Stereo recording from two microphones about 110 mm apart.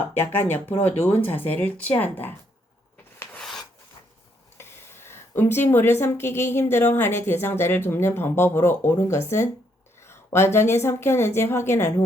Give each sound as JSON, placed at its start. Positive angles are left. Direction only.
{"t": 0.1, "sound": "speech", "side_deg": 20}
{"t": 3.3, "sound": "filing", "side_deg": 5}
{"t": 4.5, "sound": "speech", "side_deg": 20}